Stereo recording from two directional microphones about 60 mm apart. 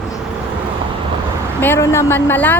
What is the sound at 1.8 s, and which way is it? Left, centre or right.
Speech, left.